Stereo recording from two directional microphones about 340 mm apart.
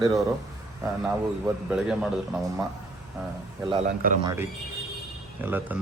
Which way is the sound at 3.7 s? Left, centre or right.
Right.